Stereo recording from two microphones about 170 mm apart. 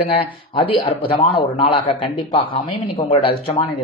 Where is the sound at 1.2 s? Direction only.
30° left (ahead or behind).